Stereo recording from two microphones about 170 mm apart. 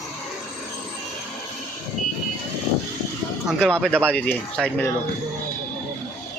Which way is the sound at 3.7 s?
10° right (ahead or behind).